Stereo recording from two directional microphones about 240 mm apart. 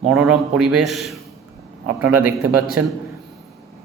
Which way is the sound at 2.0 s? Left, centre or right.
Centre.